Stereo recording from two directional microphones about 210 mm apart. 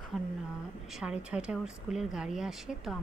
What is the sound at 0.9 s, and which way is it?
Speech, 5° right (ahead or behind).